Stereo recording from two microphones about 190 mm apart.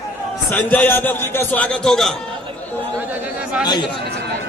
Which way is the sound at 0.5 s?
10° left (ahead or behind).